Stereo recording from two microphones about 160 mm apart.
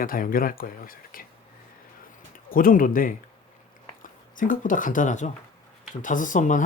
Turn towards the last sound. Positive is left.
turn(degrees=50)  # may be behind; listen again after turning